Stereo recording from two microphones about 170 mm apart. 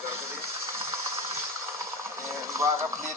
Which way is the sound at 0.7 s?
15° right (ahead or behind).